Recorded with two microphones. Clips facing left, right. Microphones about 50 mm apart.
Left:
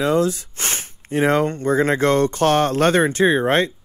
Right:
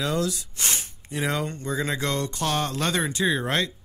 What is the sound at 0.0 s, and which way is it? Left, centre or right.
Speech, left.